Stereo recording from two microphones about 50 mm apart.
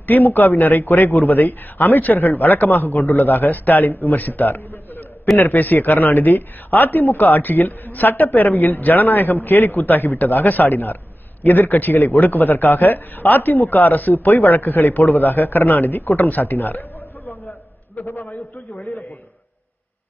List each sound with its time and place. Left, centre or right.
0.0 s a man's voice: left
17.9 s a man's voice: left